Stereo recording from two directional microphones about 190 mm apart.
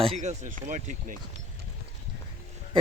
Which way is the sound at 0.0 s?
35° right (ahead or behind).